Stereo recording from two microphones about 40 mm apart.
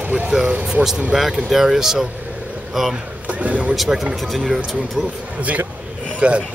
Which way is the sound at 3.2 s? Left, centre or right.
Right.